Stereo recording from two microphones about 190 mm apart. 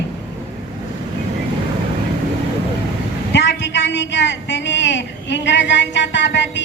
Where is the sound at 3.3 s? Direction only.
70° left (ahead or behind).